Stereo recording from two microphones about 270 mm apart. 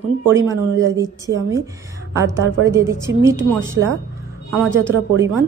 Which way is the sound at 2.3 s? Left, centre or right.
Right.